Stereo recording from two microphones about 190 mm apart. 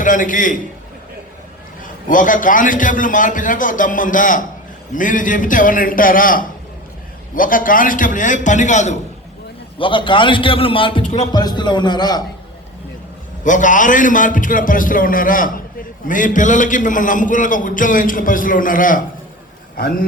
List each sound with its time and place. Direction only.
0.0 s a man's voice: 45° left (ahead or behind)
1.8 s a man's voice: 45° left (ahead or behind)
9.7 s a man's voice: 25° left (ahead or behind)
13.4 s a man's voice: 40° left (ahead or behind)